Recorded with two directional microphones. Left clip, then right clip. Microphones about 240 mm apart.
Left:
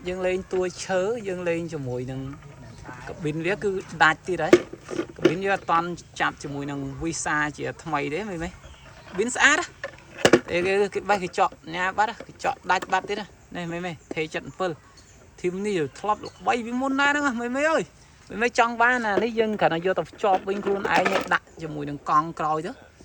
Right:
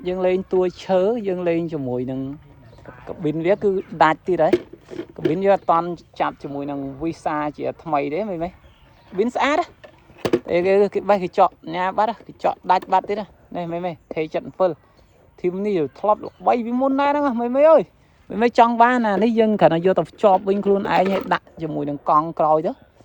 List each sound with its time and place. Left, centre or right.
0.0 s speech: right
4.5 s a sound: centre
5.3 s speech: right
18.3 s speech: right